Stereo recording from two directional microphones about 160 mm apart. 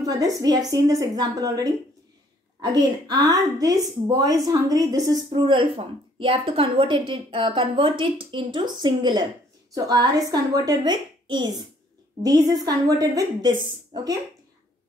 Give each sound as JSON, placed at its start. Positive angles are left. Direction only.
{"t": 0.0, "sound": "a woman's voice", "side_deg": -20}